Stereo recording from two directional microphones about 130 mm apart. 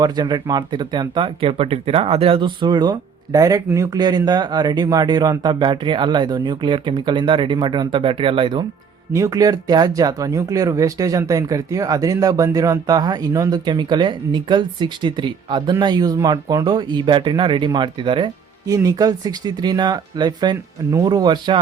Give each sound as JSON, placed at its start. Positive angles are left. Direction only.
{"t": 0.0, "sound": "speech", "side_deg": -35}
{"t": 9.1, "sound": "speech", "side_deg": -25}
{"t": 18.7, "sound": "speech", "side_deg": -30}